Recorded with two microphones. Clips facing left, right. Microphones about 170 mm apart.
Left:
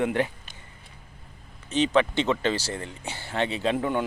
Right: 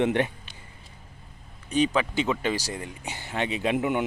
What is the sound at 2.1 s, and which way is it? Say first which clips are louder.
Speech: left 1 dB; 10° right (ahead or behind).